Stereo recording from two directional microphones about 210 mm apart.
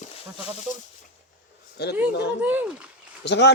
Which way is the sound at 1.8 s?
50° left (ahead or behind).